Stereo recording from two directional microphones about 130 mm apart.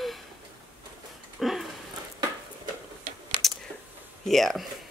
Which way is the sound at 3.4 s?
40° left (ahead or behind).